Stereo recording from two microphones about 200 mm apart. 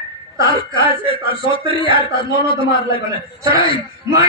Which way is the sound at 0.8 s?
25° left (ahead or behind).